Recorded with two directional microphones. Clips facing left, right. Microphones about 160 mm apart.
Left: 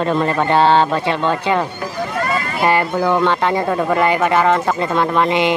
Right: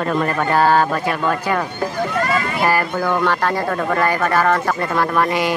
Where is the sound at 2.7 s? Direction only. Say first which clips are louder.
Left 5 dB; 20° left (ahead or behind).